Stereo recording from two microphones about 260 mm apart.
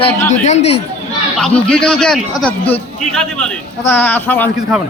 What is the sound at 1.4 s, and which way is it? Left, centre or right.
A man's voice, centre.